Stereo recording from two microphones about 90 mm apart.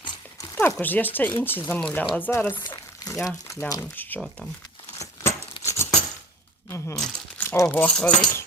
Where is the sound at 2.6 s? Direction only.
50° left (ahead or behind).